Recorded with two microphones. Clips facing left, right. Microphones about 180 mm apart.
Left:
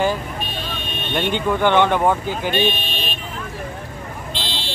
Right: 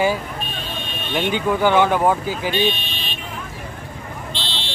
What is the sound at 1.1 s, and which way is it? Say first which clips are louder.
Speech: even; 5° right (ahead or behind).